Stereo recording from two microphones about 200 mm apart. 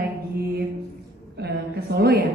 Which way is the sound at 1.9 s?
50° right (ahead or behind).